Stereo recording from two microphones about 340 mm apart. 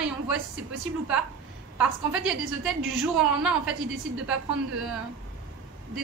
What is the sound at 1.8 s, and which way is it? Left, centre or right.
Speech, centre.